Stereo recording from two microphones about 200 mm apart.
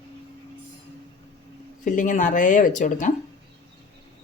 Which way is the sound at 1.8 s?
40° left (ahead or behind).